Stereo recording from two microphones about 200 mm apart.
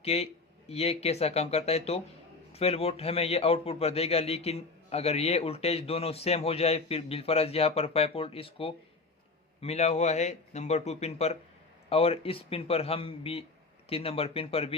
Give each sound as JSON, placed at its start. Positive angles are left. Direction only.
{"t": 0.0, "sound": "a man's voice", "side_deg": 30}